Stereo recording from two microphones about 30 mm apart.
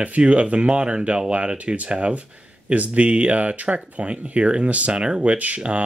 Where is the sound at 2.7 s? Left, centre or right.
Right.